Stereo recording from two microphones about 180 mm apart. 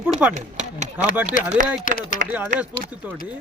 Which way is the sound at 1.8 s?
45° left (ahead or behind).